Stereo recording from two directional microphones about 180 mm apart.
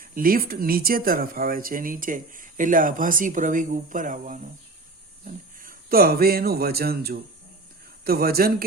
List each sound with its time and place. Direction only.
0.0 s speech: 55° right (ahead or behind)